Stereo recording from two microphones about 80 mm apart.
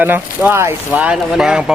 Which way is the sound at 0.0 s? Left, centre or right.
Right.